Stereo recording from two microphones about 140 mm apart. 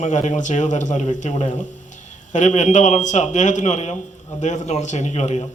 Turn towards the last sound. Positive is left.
turn(degrees=55)  # may be behind; listen again after turning